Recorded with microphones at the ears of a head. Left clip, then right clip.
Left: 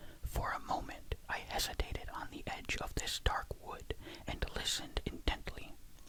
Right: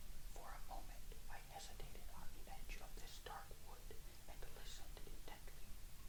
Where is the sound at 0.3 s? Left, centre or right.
Left.